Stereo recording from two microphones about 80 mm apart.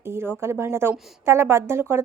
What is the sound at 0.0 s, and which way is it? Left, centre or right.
A woman's voice, right.